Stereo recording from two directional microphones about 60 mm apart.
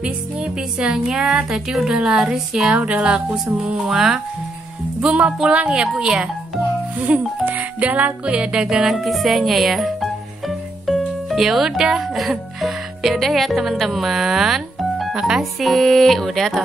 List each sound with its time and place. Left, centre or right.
0.0 s speech: centre
7.4 s speech: right
8.8 s speech: centre
15.6 s speech: centre